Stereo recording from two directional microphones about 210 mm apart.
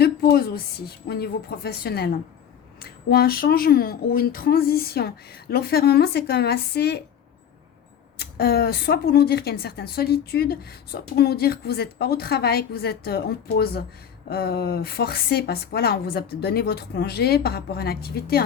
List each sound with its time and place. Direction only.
0.0 s a woman's voice: 45° left (ahead or behind)
8.2 s a woman's voice: 50° left (ahead or behind)